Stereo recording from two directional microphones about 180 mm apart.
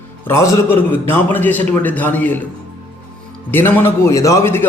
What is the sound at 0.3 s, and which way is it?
A man's voice, 15° left (ahead or behind).